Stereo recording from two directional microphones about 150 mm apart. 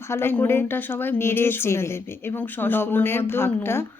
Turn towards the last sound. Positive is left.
turn(degrees=15)  # may be behind; listen again after turning